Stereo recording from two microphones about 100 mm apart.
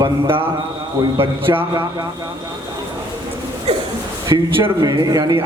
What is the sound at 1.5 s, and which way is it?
Speech, 20° right (ahead or behind).